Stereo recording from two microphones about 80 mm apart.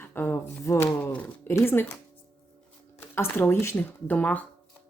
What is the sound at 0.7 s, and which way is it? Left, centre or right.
Speech, left.